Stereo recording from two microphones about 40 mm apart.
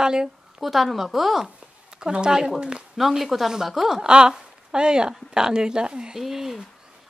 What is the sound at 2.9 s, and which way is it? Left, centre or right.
A woman's voice, centre.